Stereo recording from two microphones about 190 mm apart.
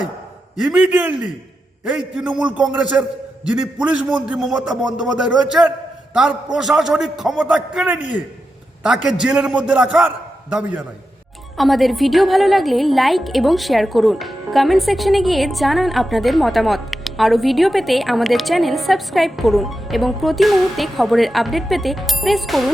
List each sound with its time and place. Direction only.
0.5 s a woman's voice: 5° right (ahead or behind)
4.7 s speech: 20° right (ahead or behind)
4.9 s a woman's voice: 5° right (ahead or behind)